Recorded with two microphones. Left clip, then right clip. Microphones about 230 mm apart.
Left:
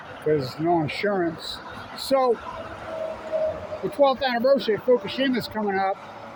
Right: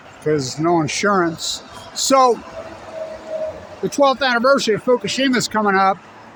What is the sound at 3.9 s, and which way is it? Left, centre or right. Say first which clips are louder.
Speech: right 5 dB; right.